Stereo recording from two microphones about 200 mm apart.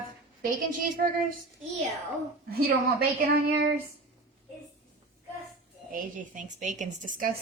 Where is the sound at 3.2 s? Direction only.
50° right (ahead or behind).